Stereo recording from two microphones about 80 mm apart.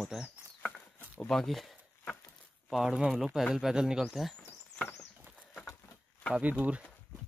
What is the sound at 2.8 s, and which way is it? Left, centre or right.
Speech, centre.